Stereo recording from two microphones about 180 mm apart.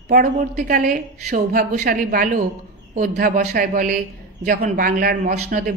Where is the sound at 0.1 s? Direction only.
50° right (ahead or behind).